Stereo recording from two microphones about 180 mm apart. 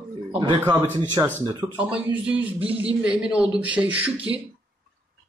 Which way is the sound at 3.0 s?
5° right (ahead or behind).